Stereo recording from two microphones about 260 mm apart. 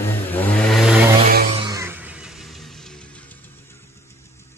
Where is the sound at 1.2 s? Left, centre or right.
Right.